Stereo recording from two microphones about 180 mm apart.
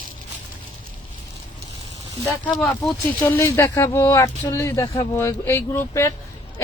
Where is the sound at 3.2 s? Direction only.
15° left (ahead or behind).